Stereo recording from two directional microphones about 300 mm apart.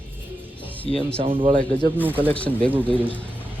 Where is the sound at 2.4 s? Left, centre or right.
Centre.